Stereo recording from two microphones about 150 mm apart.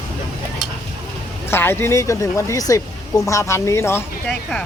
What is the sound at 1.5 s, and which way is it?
Speech, 15° left (ahead or behind).